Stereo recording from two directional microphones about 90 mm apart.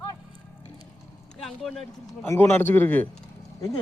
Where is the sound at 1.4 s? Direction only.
Centre (ahead or behind).